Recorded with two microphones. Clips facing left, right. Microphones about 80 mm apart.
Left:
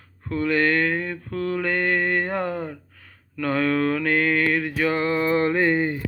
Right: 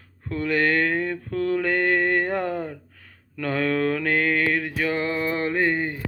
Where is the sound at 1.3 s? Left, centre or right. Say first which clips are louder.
Right 1 dB; centre.